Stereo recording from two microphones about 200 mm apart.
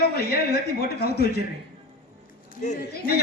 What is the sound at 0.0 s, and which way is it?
A woman's voice, 50° left (ahead or behind).